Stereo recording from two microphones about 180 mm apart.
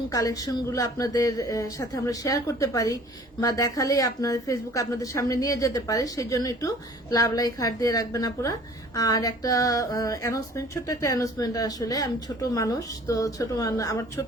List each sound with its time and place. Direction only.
0.1 s speech: 20° left (ahead or behind)